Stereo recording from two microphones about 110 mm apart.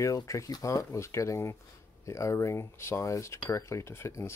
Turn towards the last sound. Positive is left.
turn(degrees=25)  # may be behind; listen again after turning